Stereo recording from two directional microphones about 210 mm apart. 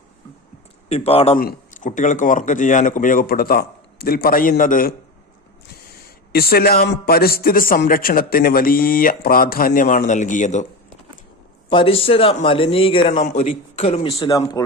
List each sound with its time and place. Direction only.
0.9 s a man's voice: 30° left (ahead or behind)
1.4 s speech: 40° left (ahead or behind)
6.3 s a man's voice: 45° left (ahead or behind)
11.7 s a man's voice: 25° left (ahead or behind)